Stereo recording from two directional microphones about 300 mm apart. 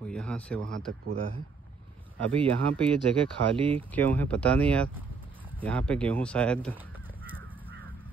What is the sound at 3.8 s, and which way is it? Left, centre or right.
Speech, centre.